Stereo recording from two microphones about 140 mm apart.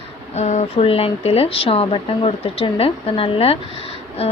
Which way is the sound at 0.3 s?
55° left (ahead or behind).